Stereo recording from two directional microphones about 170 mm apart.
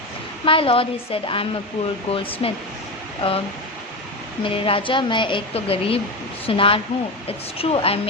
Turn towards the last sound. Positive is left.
turn(degrees=35)  # may be behind; listen again after turning